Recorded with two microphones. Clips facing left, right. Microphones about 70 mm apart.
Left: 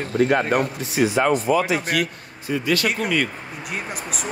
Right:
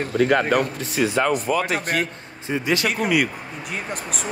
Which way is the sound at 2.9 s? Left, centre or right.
Centre.